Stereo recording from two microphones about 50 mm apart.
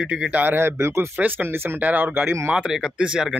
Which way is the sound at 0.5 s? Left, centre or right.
Right.